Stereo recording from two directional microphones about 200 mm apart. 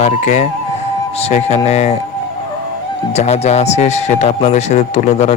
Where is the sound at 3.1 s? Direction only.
35° left (ahead or behind).